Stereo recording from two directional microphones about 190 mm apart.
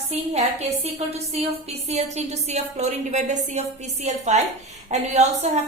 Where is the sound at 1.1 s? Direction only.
30° right (ahead or behind).